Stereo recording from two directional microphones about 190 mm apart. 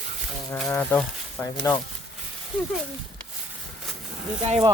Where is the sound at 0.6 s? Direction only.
10° left (ahead or behind).